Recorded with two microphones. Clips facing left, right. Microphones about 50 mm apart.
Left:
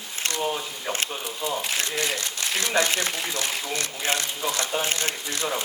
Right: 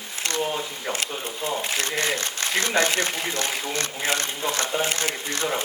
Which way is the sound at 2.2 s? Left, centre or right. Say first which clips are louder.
Right 3 dB; right.